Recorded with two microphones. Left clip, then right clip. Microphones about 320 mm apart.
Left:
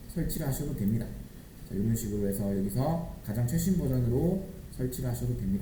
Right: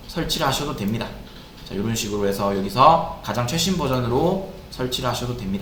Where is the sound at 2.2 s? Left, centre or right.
Right.